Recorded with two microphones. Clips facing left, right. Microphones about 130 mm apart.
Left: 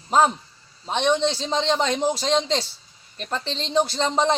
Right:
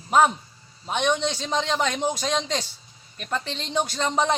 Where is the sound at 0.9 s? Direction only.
30° left (ahead or behind).